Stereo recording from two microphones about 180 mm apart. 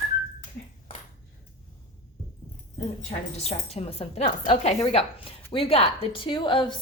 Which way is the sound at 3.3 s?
35° left (ahead or behind).